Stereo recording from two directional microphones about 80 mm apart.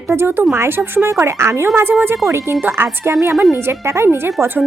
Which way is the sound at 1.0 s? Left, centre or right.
Right.